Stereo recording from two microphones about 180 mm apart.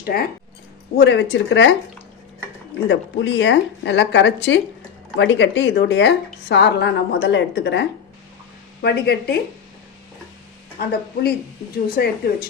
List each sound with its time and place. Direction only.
0.0 s speech: 55° left (ahead or behind)
0.9 s speech: 75° left (ahead or behind)
2.9 s speech: 85° left
5.1 s a woman's voice: 90° left; by 9.4 s 65° left (ahead or behind)
10.8 s a woman's voice: 60° left (ahead or behind)